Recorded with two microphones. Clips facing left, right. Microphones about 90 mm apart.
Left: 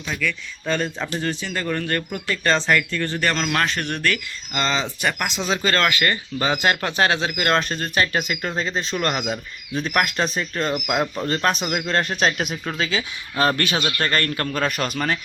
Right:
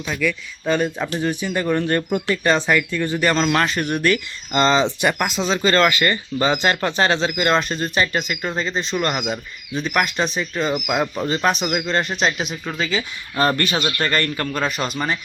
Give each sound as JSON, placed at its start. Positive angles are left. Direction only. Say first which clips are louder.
{"t": 0.2, "sound": "speech", "louder": "right 4 dB", "side_deg": -10}
{"t": 5.2, "sound": "speech", "louder": "right 3 dB", "side_deg": 0}